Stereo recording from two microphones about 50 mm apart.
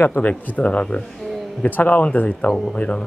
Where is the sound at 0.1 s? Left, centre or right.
Left.